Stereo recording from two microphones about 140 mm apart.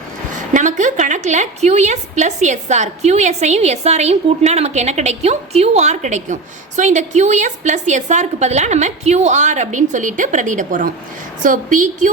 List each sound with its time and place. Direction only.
0.3 s a woman's voice: 65° right (ahead or behind)